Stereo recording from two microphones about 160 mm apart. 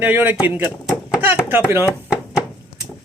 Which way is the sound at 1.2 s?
15° right (ahead or behind).